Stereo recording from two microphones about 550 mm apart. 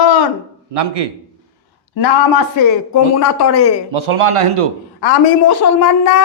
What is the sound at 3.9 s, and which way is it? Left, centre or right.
Speech, right.